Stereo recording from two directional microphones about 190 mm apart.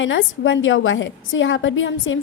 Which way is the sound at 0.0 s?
90° left.